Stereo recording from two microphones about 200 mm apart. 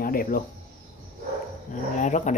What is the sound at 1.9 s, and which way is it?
Speech, 40° left (ahead or behind).